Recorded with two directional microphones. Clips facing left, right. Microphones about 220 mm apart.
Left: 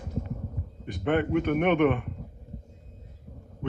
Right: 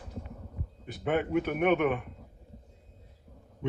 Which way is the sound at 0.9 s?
5° right (ahead or behind).